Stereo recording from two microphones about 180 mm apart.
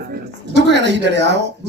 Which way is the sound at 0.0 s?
70° right (ahead or behind).